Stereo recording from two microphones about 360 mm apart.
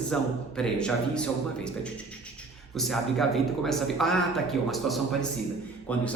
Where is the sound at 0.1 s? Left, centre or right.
Centre.